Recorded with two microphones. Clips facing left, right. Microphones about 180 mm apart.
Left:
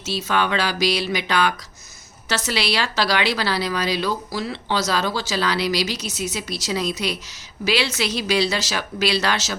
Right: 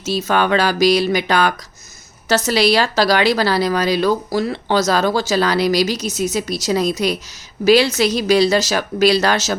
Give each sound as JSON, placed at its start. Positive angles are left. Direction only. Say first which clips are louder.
{"t": 0.0, "sound": "a woman's voice", "louder": "right 5 dB", "side_deg": -45}